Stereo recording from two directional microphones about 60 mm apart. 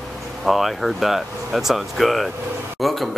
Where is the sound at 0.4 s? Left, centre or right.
Centre.